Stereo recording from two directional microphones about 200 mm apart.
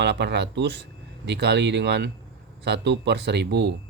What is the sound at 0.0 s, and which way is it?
Speech, 60° right (ahead or behind).